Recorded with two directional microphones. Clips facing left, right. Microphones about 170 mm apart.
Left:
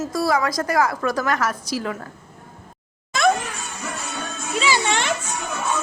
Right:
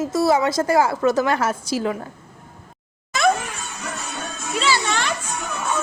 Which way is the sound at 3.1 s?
Centre (ahead or behind).